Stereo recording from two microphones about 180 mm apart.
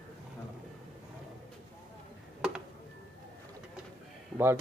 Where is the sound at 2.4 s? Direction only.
5° right (ahead or behind).